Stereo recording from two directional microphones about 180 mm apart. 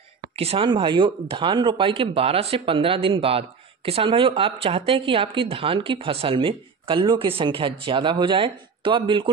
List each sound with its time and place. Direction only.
0.4 s speech: 30° right (ahead or behind)